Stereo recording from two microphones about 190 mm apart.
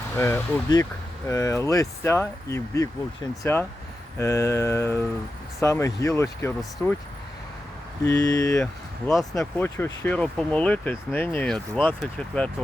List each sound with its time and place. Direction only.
0.2 s speech: 15° left (ahead or behind)
8.0 s speech: 20° left (ahead or behind)
8.6 s speech: centre (ahead or behind)
9.6 s speech: 10° left (ahead or behind)